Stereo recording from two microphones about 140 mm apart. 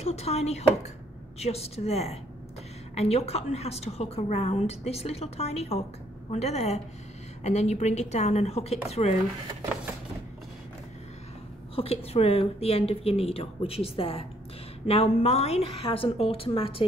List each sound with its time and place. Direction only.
0.0 s a woman's voice: 50° left (ahead or behind)
11.7 s a woman's voice: 45° left (ahead or behind)